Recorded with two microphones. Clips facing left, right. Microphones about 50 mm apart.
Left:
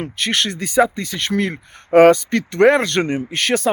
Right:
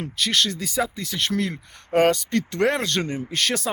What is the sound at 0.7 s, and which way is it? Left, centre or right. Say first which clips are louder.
Speech: left 9 dB; centre.